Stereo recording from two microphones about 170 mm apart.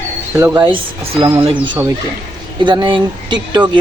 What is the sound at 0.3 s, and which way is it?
Speech, 20° right (ahead or behind).